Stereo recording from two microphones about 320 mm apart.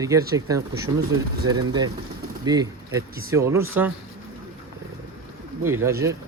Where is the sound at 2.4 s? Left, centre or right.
Centre.